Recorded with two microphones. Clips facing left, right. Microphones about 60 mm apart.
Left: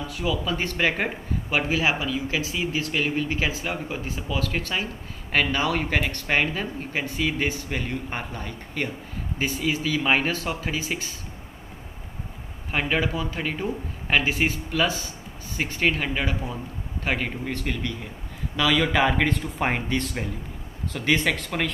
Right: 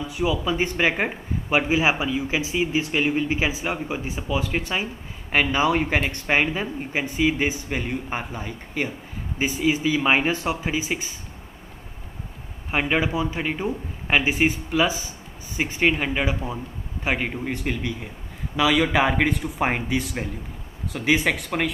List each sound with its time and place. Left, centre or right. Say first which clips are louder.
0.0 s speech: right 3 dB; centre
12.7 s speech: right 2 dB; centre